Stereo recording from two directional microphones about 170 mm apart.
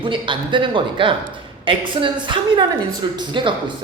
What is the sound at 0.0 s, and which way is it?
A man's voice, 30° right (ahead or behind).